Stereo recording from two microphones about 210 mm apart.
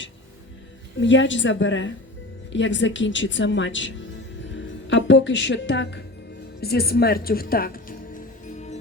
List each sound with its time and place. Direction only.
0.9 s a woman's voice: 60° left (ahead or behind); by 7.9 s 45° left (ahead or behind)
8.4 s music: 35° left (ahead or behind)